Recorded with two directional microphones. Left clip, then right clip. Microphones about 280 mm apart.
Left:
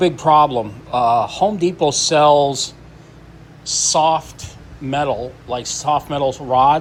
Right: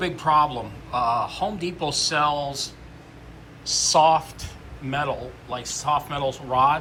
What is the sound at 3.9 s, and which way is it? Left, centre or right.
A man's voice, centre.